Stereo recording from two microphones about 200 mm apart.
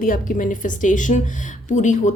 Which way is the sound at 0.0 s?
40° left (ahead or behind).